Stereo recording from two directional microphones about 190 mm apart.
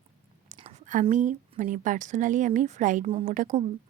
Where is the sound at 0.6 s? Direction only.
45° right (ahead or behind).